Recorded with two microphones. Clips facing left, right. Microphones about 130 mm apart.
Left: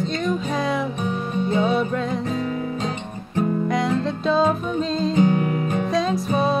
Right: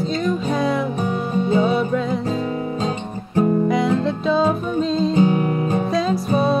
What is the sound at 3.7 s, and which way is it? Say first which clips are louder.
Music: right 3 dB; centre (ahead or behind).